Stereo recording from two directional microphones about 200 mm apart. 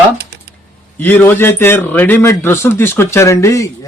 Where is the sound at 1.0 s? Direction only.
10° left (ahead or behind).